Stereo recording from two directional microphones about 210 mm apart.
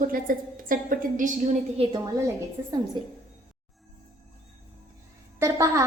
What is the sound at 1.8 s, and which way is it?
Speech, 25° right (ahead or behind).